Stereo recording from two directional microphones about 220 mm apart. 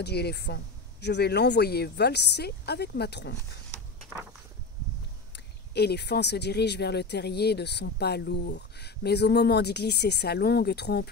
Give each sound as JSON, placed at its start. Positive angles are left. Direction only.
{"t": 0.0, "sound": "speech", "side_deg": 45}
{"t": 5.3, "sound": "speech", "side_deg": 50}